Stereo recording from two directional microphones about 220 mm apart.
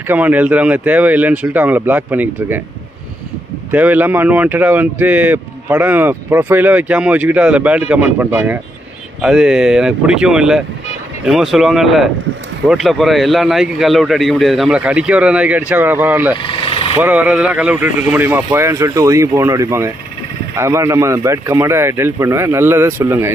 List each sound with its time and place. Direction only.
0.1 s speech: 5° right (ahead or behind)
3.7 s speech: 5° right (ahead or behind)
16.4 s speech: 25° left (ahead or behind)
17.0 s speech: 10° right (ahead or behind)